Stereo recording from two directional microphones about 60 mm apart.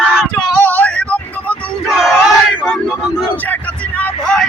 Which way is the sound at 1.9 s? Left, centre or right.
Centre.